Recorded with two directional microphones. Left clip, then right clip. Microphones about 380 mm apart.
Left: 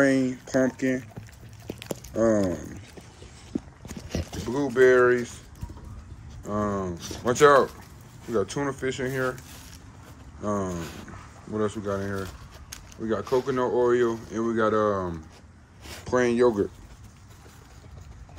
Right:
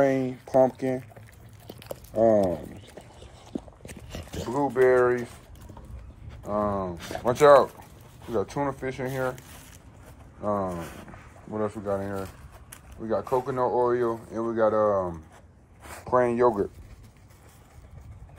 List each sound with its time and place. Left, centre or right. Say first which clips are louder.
0.1 s speech: right 1 dB; centre
1.7 s a sound: left 4 dB; centre
3.5 s a sound: left 3 dB; centre
4.5 s speech: left 2 dB; centre
6.4 s speech: right 1 dB; centre
10.4 s speech: right 1 dB; centre